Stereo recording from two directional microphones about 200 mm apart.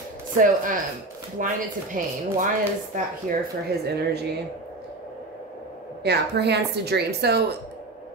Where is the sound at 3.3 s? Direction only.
40° right (ahead or behind).